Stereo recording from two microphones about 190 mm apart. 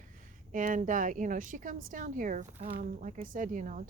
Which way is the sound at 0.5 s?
45° right (ahead or behind).